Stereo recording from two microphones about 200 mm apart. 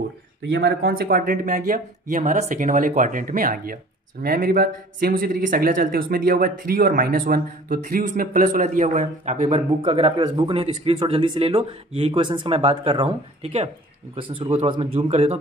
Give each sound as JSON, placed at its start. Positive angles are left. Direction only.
{"t": 0.4, "sound": "a man's voice", "side_deg": -55}